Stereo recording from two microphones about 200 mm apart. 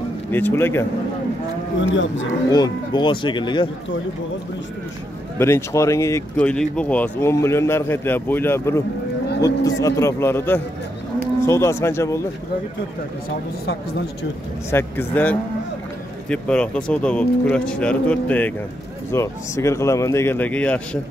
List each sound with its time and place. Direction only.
0.3 s speech: 10° left (ahead or behind)
1.8 s moo: 70° left (ahead or behind)
2.5 s speech: 20° left (ahead or behind)
5.4 s speech: 15° left (ahead or behind)
14.7 s speech: 10° left (ahead or behind)